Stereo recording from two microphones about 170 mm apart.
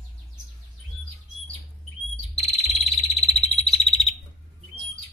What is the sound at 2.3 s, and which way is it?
Bird, 35° left (ahead or behind).